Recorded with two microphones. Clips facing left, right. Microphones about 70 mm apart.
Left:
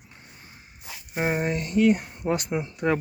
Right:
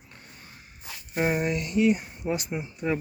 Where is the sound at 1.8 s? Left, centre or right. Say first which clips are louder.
Left 3 dB; left.